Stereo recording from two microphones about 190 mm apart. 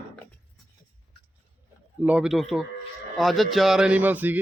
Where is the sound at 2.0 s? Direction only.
5° right (ahead or behind).